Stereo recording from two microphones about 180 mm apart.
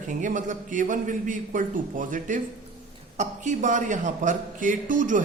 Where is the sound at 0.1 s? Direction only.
45° right (ahead or behind).